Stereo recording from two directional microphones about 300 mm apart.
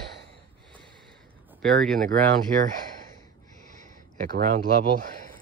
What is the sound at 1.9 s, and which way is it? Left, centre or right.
Speech, right.